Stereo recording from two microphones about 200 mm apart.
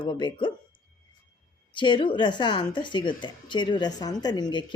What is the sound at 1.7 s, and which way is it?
Speech, 25° left (ahead or behind).